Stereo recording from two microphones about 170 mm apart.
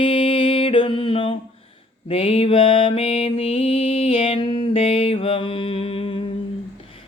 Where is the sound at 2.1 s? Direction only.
35° left (ahead or behind).